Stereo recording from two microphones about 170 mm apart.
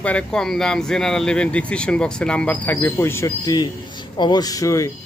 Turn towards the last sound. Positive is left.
turn(degrees=20)  # may be behind; listen again after turning